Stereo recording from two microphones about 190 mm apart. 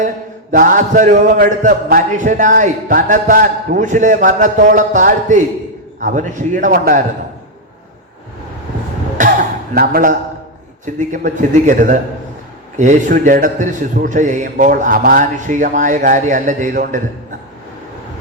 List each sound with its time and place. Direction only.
0.5 s speech: 45° right (ahead or behind)
9.1 s cough: 45° right (ahead or behind)
11.1 s a man's voice: 40° right (ahead or behind)